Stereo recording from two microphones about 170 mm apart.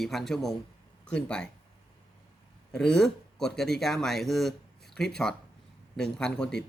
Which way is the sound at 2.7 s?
5° left (ahead or behind).